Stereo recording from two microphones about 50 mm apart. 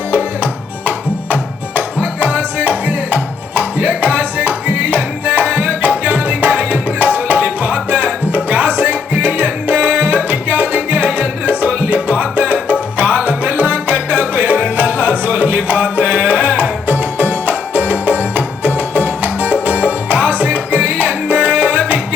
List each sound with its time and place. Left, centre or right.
0.9 s music: right
7.3 s tabla: right
8.4 s music: right